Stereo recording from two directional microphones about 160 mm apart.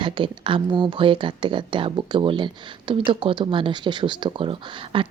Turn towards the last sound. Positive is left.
turn(degrees=-35)  # may be behind; listen again after turning